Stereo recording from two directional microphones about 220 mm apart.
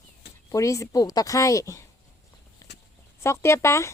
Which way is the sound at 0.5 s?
15° left (ahead or behind).